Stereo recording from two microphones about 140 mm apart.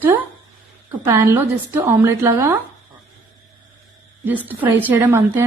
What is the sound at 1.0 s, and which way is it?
A woman's voice, 20° right (ahead or behind).